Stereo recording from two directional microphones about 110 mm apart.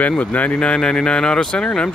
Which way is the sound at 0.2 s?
15° left (ahead or behind).